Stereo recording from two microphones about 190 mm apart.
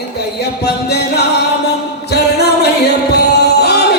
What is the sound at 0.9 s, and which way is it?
Music, 60° left (ahead or behind).